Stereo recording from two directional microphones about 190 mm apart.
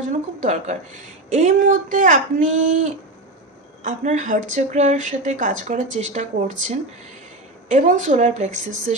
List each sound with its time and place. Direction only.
0.4 s speech: 40° right (ahead or behind)